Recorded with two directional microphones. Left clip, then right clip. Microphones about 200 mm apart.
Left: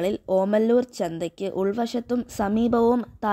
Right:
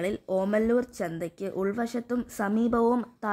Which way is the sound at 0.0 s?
20° left (ahead or behind).